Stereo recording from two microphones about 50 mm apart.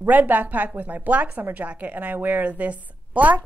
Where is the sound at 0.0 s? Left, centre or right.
Right.